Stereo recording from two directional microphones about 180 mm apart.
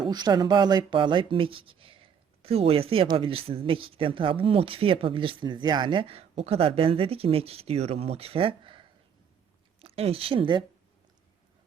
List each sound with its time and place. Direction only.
0.1 s speech: 25° right (ahead or behind)